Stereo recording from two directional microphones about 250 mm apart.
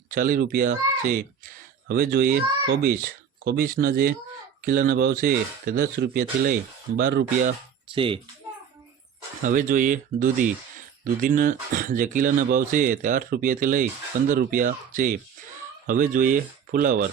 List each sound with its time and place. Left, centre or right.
0.1 s speech: right
9.4 s speech: right